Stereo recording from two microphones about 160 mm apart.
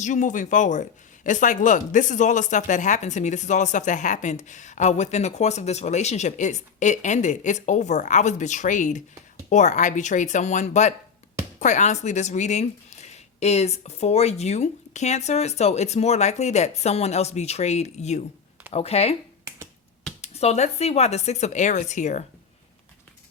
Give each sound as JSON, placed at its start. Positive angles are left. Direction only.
{"t": 0.0, "sound": "speech", "side_deg": 50}
{"t": 20.2, "sound": "speech", "side_deg": 40}